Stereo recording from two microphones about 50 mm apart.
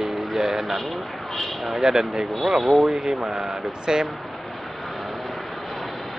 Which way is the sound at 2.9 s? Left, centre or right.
Centre.